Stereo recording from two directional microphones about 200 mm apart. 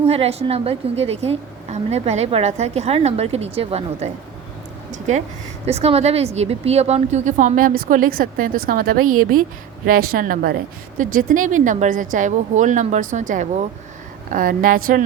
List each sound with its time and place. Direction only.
0.0 s a woman's voice: 30° right (ahead or behind); by 9.0 s 45° right (ahead or behind)
9.0 s a woman's voice: 90° right
10.1 s a woman's voice: 45° right (ahead or behind)